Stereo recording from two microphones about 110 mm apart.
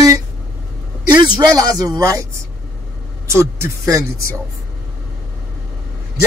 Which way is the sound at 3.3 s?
25° right (ahead or behind).